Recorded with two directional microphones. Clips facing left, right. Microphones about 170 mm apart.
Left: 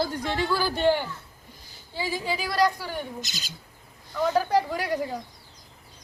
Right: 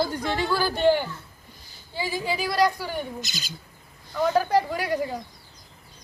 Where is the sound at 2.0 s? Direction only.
5° right (ahead or behind).